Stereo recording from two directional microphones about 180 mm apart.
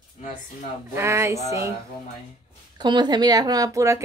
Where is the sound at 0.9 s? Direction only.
15° right (ahead or behind).